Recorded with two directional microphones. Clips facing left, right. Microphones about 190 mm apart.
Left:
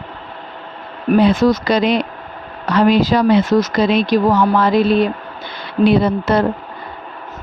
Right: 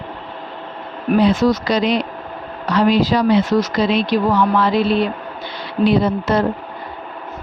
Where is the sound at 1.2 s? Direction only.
55° left (ahead or behind).